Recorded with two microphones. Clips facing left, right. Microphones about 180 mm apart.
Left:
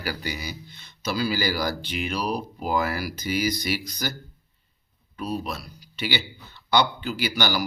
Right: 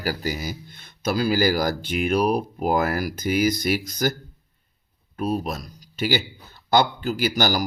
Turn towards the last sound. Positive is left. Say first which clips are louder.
# right 3 dB
turn(degrees=-45)  # may be behind; listen again after turning